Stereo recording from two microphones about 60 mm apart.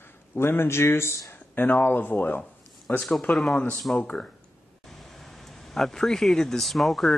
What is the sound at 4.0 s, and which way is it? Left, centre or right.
Speech, centre.